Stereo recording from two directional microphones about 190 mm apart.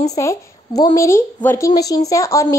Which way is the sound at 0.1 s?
15° left (ahead or behind).